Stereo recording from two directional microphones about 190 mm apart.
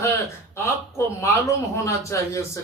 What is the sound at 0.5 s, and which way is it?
Speech, 15° left (ahead or behind).